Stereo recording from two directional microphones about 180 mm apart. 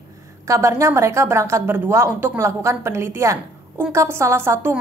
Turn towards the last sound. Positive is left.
turn(degrees=-15)  # may be behind; listen again after turning